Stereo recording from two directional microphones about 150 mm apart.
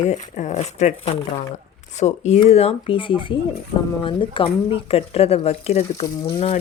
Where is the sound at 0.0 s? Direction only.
50° left (ahead or behind).